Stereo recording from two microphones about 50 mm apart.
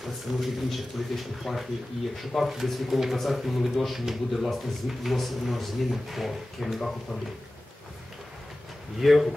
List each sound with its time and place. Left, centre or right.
0.0 s speech: centre
9.0 s speech: centre